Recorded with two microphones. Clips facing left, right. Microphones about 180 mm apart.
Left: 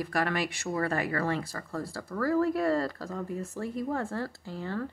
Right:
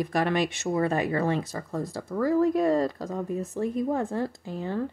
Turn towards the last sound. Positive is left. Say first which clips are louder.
# right 4 dB
turn(degrees=-20)  # may be behind; listen again after turning